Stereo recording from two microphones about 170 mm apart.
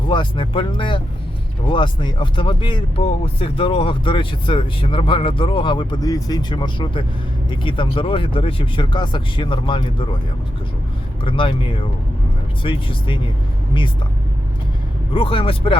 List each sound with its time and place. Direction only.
0.1 s speech: 30° left (ahead or behind)
11.2 s speech: 30° left (ahead or behind)
15.1 s speech: 30° left (ahead or behind)